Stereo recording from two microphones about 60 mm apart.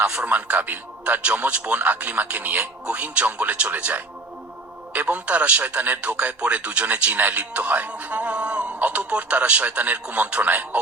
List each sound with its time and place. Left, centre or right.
0.0 s a man's voice: centre